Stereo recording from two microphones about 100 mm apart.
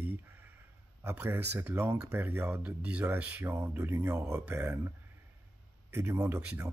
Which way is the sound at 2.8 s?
15° right (ahead or behind).